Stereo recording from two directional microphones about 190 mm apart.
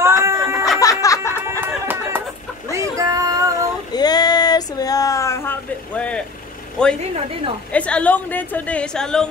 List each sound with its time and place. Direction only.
0.0 s music: 15° right (ahead or behind)
0.7 s music: 15° left (ahead or behind)
1.6 s music: 10° right (ahead or behind)
2.7 s child singing: 15° right (ahead or behind)
3.9 s a sound: 20° left (ahead or behind)
7.0 s speech: 30° right (ahead or behind)
7.7 s a woman's voice: 5° left (ahead or behind)